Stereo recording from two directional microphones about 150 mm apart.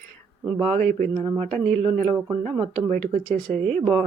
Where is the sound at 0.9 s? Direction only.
50° right (ahead or behind).